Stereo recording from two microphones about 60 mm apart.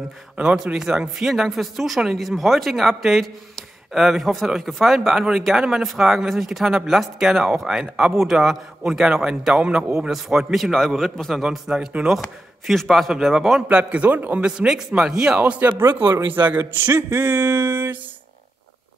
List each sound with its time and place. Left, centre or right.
0.4 s a man's voice: right
0.7 s a man's voice: centre
11.4 s a man's voice: centre
12.2 s a man's voice: centre
13.6 s a man's voice: right
15.0 s a man's voice: centre
15.6 s a man's voice: right